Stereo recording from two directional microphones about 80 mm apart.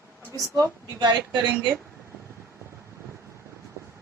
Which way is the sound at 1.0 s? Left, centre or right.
Right.